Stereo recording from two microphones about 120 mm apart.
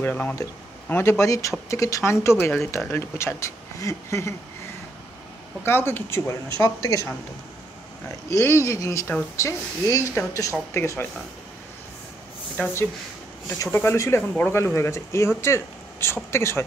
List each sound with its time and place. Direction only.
0.0 s speech: 15° left (ahead or behind)
5.7 s speech: 20° left (ahead or behind)
8.3 s speech: 25° left (ahead or behind)
12.6 s speech: 15° left (ahead or behind)